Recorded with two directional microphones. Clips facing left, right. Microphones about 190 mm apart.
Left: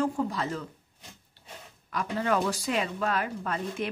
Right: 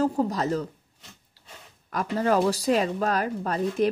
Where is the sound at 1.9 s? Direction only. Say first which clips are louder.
Right 4 dB; 40° right (ahead or behind).